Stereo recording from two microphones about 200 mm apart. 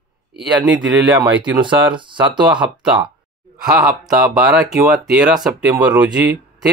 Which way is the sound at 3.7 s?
10° right (ahead or behind).